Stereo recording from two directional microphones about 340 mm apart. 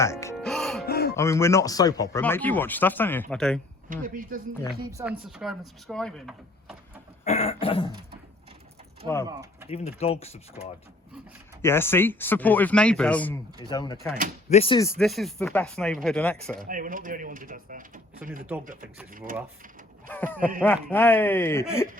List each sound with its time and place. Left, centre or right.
0.0 s music: centre
0.9 s music: left
1.1 s speech: centre
3.8 s speech: right
4.8 s speech: centre
7.3 s speech: centre
9.2 s speech: centre
9.6 s speech: centre
11.6 s speech: centre
16.6 s speech: right
20.1 s speech: centre